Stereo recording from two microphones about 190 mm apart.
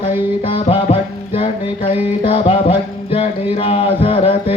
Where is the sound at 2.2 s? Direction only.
30° left (ahead or behind).